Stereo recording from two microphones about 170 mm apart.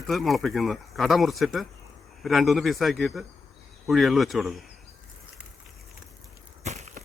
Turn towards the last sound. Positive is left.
turn(degrees=-40)  # may be behind; listen again after turning